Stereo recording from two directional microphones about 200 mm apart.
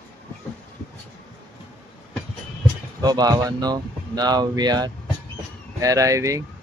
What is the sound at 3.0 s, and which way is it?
Speech, 20° right (ahead or behind).